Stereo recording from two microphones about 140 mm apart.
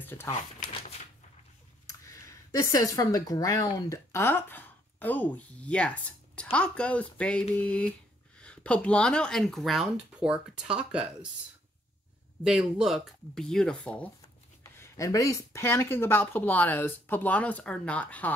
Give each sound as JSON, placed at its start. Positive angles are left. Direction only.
{"t": 0.0, "sound": "speech", "side_deg": 15}
{"t": 0.3, "sound": "a sound", "side_deg": 50}
{"t": 1.9, "sound": "speech", "side_deg": 20}
{"t": 12.4, "sound": "speech", "side_deg": -5}
{"t": 14.6, "sound": "speech", "side_deg": 20}